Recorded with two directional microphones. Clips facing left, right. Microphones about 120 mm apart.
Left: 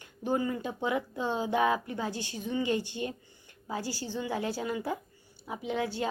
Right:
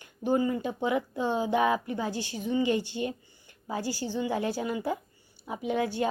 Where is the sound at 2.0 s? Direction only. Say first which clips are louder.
Right 3 dB; 40° right (ahead or behind).